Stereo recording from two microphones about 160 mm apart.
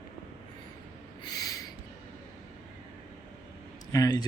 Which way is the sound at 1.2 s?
20° left (ahead or behind).